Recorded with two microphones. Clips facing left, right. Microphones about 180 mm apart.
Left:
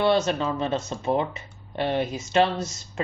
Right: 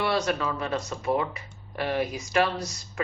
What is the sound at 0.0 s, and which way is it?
Speech, 25° left (ahead or behind).